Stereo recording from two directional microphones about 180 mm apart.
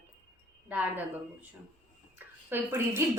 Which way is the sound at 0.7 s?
10° right (ahead or behind).